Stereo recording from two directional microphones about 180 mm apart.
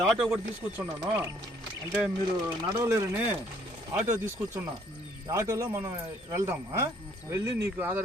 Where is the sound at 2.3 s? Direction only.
20° right (ahead or behind).